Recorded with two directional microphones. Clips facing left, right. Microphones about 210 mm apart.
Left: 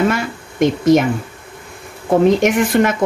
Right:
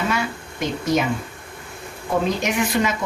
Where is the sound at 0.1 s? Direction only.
50° left (ahead or behind).